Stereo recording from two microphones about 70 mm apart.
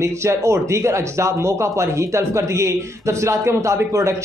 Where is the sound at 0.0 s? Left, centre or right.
Right.